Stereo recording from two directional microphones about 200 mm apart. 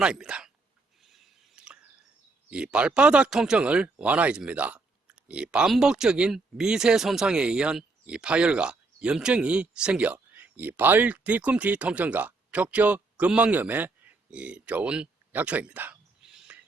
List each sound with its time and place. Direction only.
0.0 s speech: 5° right (ahead or behind)
1.0 s a sound: centre (ahead or behind)
2.5 s speech: 5° right (ahead or behind)